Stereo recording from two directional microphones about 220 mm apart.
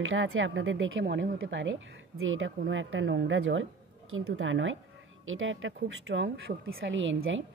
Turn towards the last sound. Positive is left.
turn(degrees=-60)  # may be behind; listen again after turning